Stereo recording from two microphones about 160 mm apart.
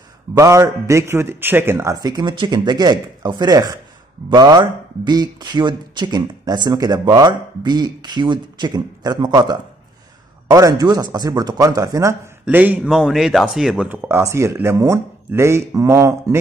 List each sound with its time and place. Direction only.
0.3 s speech: 20° right (ahead or behind)